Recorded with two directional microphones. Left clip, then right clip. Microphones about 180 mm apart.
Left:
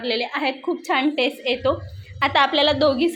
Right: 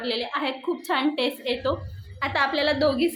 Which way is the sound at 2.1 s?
35° left (ahead or behind).